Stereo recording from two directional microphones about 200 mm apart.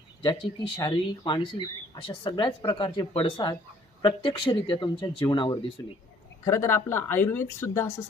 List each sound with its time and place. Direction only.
0.8 s speech: 20° left (ahead or behind)